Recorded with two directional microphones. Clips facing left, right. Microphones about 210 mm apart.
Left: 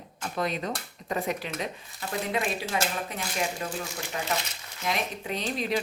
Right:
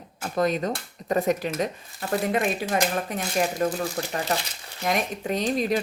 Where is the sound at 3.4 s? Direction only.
40° right (ahead or behind).